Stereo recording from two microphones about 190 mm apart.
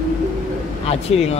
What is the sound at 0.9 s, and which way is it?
Speech, 30° left (ahead or behind).